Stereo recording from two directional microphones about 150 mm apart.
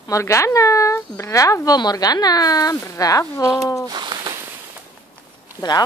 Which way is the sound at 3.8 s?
30° right (ahead or behind).